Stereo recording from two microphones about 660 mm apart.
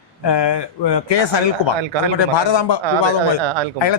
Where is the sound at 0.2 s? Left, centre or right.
Left.